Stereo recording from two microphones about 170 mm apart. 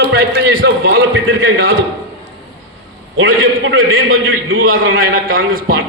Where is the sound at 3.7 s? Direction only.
60° right (ahead or behind).